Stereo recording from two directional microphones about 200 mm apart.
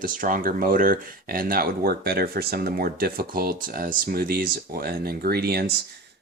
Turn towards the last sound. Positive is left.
turn(degrees=-50)  # may be behind; listen again after turning